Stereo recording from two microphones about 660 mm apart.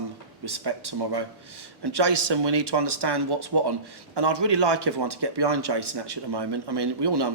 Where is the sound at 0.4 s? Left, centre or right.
Right.